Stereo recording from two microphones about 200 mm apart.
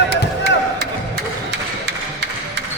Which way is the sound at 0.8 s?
55° right (ahead or behind).